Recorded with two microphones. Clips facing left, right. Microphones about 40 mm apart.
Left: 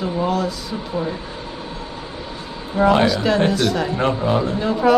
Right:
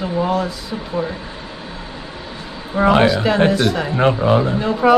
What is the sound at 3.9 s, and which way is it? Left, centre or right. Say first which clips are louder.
Speech: right 4 dB; right.